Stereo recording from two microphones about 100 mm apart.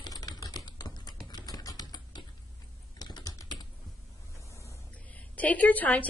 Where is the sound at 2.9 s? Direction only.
45° left (ahead or behind).